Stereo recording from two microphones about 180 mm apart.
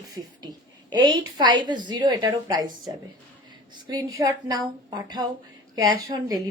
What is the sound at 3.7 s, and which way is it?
Speech, 20° right (ahead or behind).